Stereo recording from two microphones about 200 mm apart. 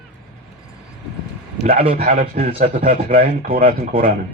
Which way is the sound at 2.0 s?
40° right (ahead or behind).